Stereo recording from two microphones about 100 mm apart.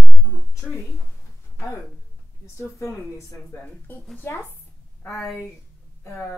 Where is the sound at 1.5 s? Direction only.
30° left (ahead or behind).